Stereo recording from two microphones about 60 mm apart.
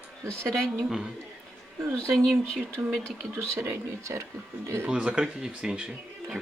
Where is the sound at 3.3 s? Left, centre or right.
Right.